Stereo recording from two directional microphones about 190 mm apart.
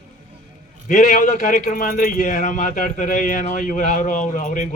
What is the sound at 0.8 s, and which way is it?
A man's voice, 40° left (ahead or behind).